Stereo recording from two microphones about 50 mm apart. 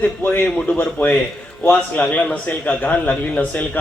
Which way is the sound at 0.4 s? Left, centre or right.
Left.